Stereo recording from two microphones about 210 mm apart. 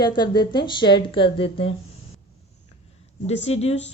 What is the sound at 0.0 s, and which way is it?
Speech, 20° left (ahead or behind).